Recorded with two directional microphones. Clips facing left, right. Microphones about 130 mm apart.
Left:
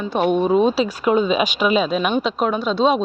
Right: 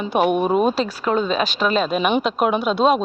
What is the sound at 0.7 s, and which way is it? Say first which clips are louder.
Speech: left 3 dB; 10° left (ahead or behind).